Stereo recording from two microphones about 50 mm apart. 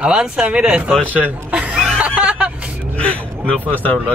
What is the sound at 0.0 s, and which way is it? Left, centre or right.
Speech, centre.